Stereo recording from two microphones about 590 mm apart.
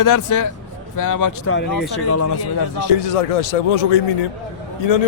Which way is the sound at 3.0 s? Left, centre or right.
Left.